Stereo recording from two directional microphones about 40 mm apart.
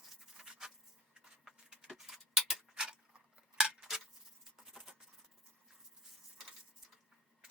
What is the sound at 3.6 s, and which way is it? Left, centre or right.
Cutlery, centre.